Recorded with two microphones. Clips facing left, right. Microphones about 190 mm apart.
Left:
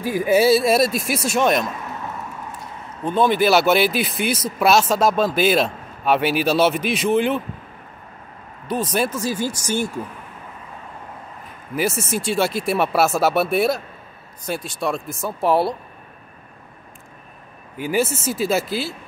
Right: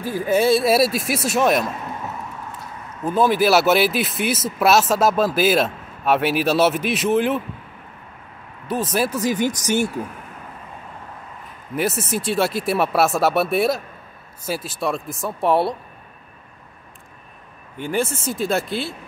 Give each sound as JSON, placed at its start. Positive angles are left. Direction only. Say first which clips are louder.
{"t": 0.0, "sound": "speech", "louder": "left 2 dB", "side_deg": 15}
{"t": 3.0, "sound": "speech", "louder": "even", "side_deg": -5}
{"t": 8.6, "sound": "speech", "louder": "even", "side_deg": -5}
{"t": 9.1, "sound": "speech", "louder": "right 3 dB", "side_deg": -15}
{"t": 11.7, "sound": "speech", "louder": "even", "side_deg": 0}
{"t": 17.7, "sound": "speech", "louder": "left 2 dB", "side_deg": 5}